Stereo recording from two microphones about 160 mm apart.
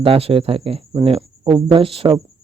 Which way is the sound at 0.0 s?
35° right (ahead or behind).